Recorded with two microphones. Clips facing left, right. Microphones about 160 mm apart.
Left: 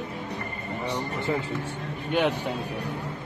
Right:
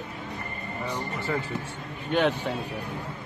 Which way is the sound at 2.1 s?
10° left (ahead or behind).